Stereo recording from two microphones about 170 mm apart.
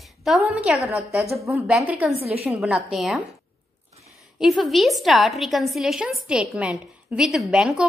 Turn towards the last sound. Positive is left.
turn(degrees=-5)  # may be behind; listen again after turning